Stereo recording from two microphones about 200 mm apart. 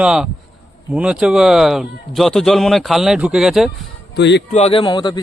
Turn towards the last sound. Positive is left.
turn(degrees=20)  # may be behind; listen again after turning